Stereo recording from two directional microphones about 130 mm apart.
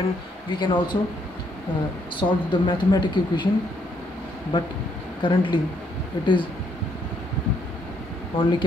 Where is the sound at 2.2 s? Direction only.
25° left (ahead or behind).